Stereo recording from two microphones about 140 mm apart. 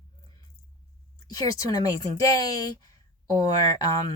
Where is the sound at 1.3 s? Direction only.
25° left (ahead or behind).